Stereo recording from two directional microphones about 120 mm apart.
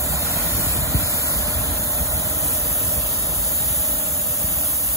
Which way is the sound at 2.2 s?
25° right (ahead or behind).